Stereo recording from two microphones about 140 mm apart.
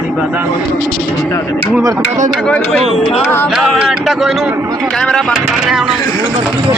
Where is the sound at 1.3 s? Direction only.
20° left (ahead or behind).